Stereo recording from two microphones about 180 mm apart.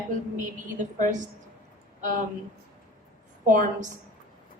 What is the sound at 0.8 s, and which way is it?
Speech, 45° right (ahead or behind).